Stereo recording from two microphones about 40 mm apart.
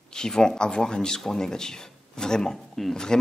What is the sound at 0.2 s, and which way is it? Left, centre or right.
Speech, centre.